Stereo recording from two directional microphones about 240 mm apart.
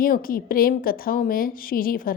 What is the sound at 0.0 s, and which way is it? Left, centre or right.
A woman's voice, left.